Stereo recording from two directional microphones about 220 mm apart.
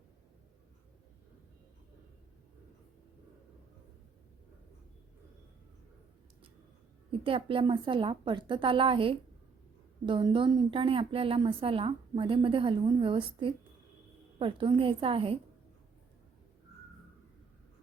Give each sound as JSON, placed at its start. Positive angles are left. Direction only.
{"t": 7.1, "sound": "a woman's voice", "side_deg": -25}